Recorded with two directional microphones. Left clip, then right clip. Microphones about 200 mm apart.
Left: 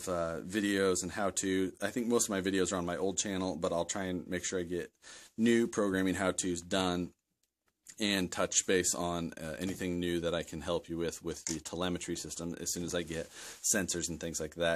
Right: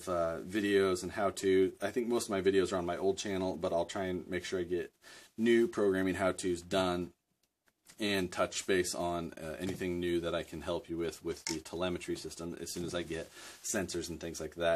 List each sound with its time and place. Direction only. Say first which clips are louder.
0.0 s speech: right 1 dB; 40° left (ahead or behind)